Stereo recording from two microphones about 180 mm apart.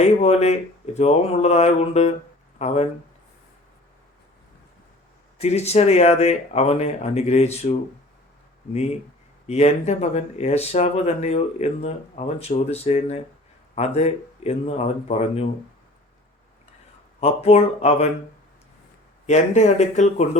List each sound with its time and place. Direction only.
0.0 s speech: 40° left (ahead or behind)
5.4 s speech: 35° left (ahead or behind)
17.2 s speech: 35° left (ahead or behind)
19.2 s speech: 40° left (ahead or behind)